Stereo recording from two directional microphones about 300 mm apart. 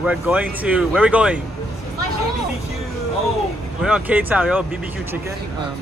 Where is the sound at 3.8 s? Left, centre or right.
Centre.